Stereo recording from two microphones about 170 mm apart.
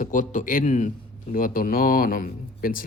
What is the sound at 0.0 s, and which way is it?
Speech, 50° left (ahead or behind).